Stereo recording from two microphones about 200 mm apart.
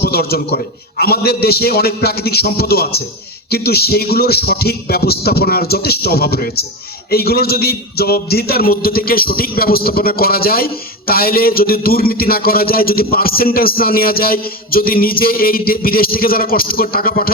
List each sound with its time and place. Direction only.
0.0 s a man's voice: 50° left (ahead or behind)